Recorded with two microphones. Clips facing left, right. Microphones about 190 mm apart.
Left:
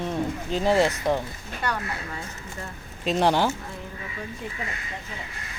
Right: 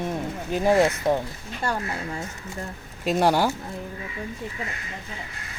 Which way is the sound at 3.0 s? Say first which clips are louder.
Right 1 dB; 10° right (ahead or behind).